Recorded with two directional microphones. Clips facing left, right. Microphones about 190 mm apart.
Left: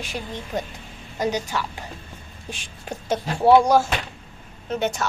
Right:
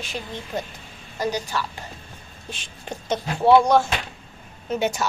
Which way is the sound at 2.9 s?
10° left (ahead or behind).